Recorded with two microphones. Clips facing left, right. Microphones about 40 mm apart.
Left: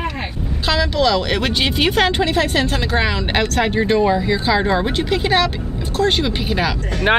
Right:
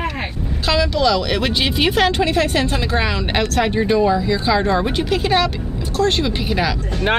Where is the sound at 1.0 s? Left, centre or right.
Centre.